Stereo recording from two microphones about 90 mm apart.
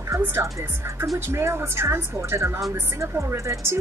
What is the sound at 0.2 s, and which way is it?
A woman's voice, 30° right (ahead or behind).